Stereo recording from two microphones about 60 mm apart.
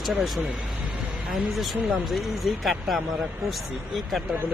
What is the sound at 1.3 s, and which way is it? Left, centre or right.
Speech, centre.